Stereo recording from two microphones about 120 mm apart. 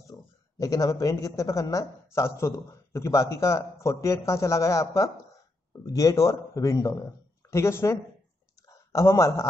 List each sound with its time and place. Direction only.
0.6 s a man's voice: 30° left (ahead or behind)